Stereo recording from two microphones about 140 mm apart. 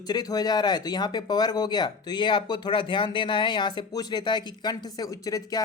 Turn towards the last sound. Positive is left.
turn(degrees=25)  # may be behind; listen again after turning